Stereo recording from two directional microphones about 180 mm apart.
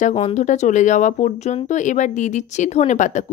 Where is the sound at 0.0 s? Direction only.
35° left (ahead or behind).